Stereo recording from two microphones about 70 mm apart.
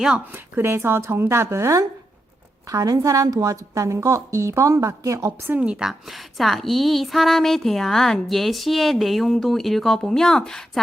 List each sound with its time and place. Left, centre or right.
0.3 s speech: right
2.6 s a woman's voice: right
5.5 s a woman's voice: centre